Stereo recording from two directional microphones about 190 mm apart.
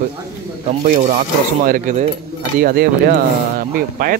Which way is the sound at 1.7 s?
40° right (ahead or behind).